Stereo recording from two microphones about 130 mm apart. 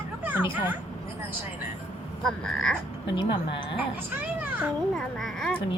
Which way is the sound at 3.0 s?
40° left (ahead or behind).